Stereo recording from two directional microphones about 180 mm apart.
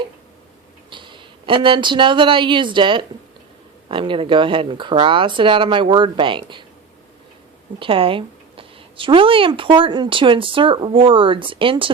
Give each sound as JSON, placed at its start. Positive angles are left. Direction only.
{"t": 0.9, "sound": "speech", "side_deg": -25}
{"t": 7.8, "sound": "speech", "side_deg": -30}